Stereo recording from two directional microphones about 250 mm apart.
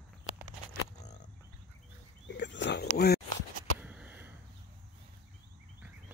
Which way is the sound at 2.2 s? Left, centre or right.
Left.